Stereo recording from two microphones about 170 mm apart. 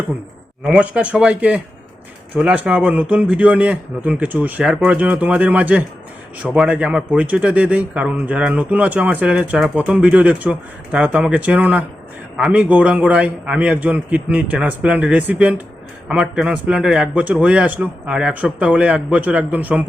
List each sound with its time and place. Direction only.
0.6 s a man's voice: 5° right (ahead or behind)